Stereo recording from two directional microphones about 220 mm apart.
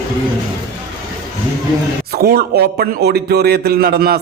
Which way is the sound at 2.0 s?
45° right (ahead or behind).